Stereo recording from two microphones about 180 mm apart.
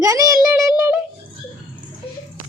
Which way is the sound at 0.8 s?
10° right (ahead or behind).